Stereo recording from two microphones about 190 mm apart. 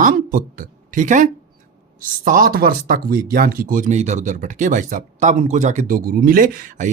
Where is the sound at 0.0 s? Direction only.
45° right (ahead or behind).